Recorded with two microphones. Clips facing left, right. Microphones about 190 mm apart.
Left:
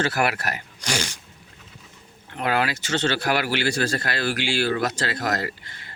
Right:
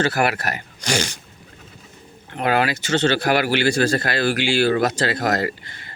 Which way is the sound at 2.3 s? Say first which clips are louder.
Right 4 dB; 60° right (ahead or behind).